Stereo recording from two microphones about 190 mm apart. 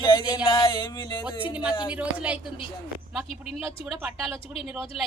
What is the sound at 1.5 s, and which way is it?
A woman's voice, 5° right (ahead or behind).